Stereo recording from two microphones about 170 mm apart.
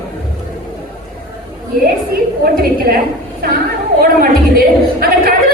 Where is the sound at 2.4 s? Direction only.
60° right (ahead or behind).